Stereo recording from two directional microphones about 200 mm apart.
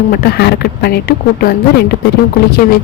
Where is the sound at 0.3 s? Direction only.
55° left (ahead or behind).